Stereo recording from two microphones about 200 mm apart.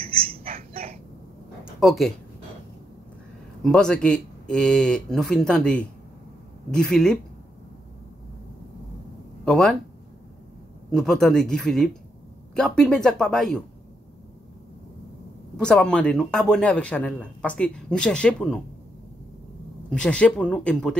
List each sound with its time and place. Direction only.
0.4 s a sound: 30° right (ahead or behind)
1.6 s a sound: centre (ahead or behind)
3.6 s a man's voice: 5° left (ahead or behind)
9.4 s speech: centre (ahead or behind)
10.9 s a man's voice: centre (ahead or behind)
15.5 s a man's voice: 5° left (ahead or behind)
19.9 s a man's voice: 5° left (ahead or behind)